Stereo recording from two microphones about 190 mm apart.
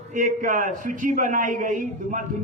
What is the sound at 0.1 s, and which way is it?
A man's voice, 40° right (ahead or behind).